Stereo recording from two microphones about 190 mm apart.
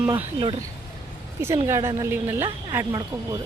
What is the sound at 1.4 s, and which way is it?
A woman's voice, 15° right (ahead or behind).